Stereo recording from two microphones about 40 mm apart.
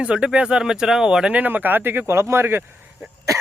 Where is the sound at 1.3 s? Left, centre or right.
Right.